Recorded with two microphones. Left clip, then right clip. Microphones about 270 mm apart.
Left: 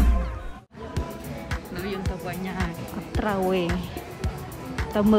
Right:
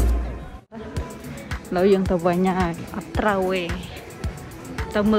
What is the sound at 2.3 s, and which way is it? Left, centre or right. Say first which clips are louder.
Speech: right 10 dB; centre.